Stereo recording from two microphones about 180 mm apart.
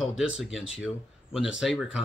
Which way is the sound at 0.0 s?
5° right (ahead or behind).